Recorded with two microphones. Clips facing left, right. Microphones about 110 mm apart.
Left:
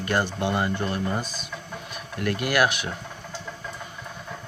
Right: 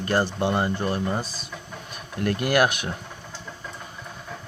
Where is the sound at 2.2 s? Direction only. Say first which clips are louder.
Right 2 dB; 45° right (ahead or behind).